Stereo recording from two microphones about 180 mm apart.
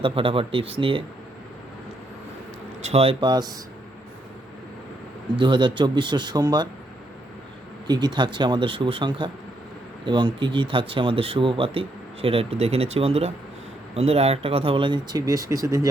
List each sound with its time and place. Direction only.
0.0 s speech: 30° right (ahead or behind)
2.8 s speech: 35° right (ahead or behind)
5.4 s speech: 25° right (ahead or behind)
7.9 s speech: 25° right (ahead or behind)